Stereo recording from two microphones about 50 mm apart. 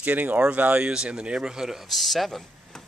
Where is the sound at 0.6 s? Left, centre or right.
Right.